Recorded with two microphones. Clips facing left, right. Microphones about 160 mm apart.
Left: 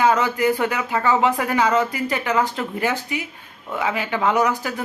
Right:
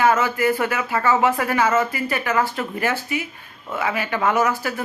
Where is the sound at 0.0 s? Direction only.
15° left (ahead or behind).